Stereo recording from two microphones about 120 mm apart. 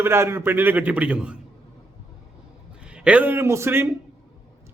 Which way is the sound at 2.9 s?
10° right (ahead or behind).